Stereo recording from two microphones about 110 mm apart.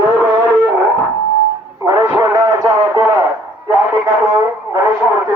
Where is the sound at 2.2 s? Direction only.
30° right (ahead or behind).